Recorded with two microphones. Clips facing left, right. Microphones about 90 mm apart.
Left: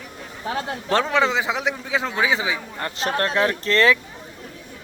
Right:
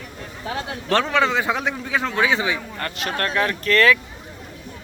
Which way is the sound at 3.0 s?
30° left (ahead or behind).